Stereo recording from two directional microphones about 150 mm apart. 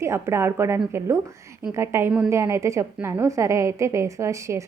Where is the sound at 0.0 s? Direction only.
20° right (ahead or behind).